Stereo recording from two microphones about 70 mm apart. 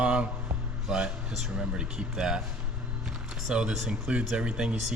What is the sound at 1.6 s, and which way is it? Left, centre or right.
Speech, centre.